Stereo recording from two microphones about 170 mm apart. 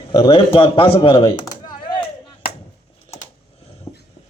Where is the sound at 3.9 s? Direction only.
35° left (ahead or behind).